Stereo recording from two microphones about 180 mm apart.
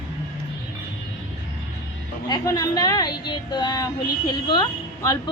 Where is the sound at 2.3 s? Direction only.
20° left (ahead or behind).